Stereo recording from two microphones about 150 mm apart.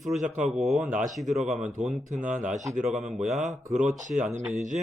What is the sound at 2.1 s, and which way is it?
Speech, 55° right (ahead or behind).